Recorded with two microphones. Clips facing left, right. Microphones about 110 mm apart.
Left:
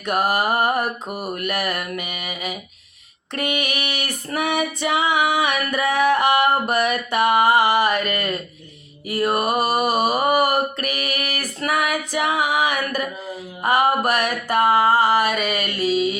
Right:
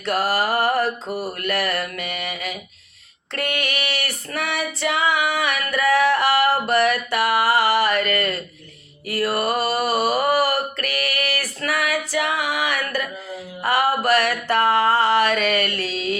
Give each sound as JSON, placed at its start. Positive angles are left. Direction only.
{"t": 0.0, "sound": "mantra", "side_deg": 15}
{"t": 3.3, "sound": "female singing", "side_deg": 15}
{"t": 9.0, "sound": "a sound", "side_deg": 20}
{"t": 13.6, "sound": "music", "side_deg": 20}